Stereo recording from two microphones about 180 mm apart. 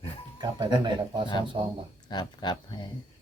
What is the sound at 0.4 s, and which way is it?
Speech, 25° right (ahead or behind).